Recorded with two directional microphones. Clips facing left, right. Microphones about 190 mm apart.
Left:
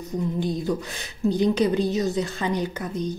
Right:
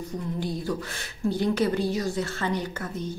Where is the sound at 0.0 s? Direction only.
20° left (ahead or behind).